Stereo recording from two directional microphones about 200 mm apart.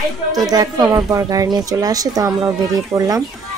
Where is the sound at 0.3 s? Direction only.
20° right (ahead or behind).